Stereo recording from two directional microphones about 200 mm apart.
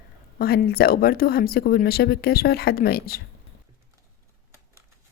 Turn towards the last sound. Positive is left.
turn(degrees=50)  # may be behind; listen again after turning